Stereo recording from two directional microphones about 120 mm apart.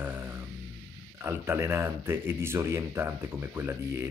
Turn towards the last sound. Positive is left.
turn(degrees=-20)  # may be behind; listen again after turning